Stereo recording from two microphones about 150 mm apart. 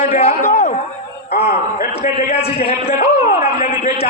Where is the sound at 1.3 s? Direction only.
45° left (ahead or behind).